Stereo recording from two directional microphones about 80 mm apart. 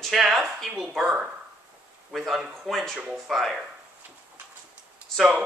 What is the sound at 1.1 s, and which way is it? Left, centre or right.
Speech, centre.